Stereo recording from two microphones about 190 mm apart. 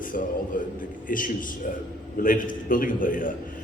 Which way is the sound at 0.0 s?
45° left (ahead or behind).